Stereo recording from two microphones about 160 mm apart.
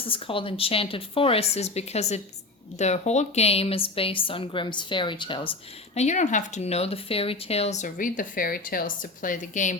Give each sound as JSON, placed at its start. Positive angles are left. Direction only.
{"t": 0.0, "sound": "speech", "side_deg": 35}
{"t": 5.9, "sound": "speech", "side_deg": 45}